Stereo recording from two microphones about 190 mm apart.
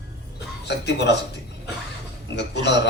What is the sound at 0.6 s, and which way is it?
Speech, 65° left (ahead or behind).